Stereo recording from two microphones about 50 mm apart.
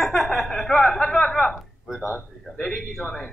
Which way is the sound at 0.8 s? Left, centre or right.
Centre.